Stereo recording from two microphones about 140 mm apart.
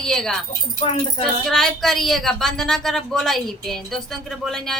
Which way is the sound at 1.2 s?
5° left (ahead or behind).